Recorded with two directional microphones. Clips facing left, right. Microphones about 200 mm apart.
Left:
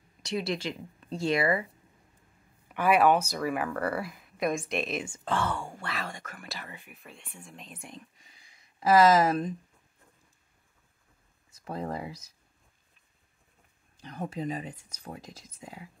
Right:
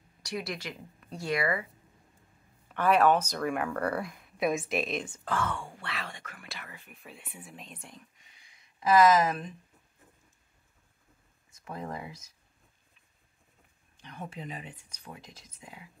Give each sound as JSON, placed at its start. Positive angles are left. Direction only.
{"t": 0.2, "sound": "speech", "side_deg": 25}
{"t": 2.7, "sound": "speech", "side_deg": 10}
{"t": 5.2, "sound": "speech", "side_deg": 30}
{"t": 6.9, "sound": "speech", "side_deg": 0}
{"t": 8.7, "sound": "speech", "side_deg": 35}
{"t": 11.5, "sound": "speech", "side_deg": 35}
{"t": 13.9, "sound": "speech", "side_deg": 40}